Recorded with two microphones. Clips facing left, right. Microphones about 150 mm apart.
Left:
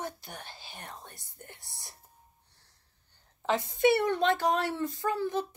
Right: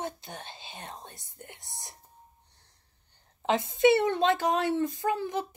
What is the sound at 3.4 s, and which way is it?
Speech, 20° right (ahead or behind).